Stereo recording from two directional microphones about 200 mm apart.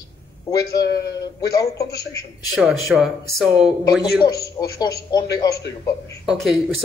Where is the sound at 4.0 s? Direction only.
20° left (ahead or behind).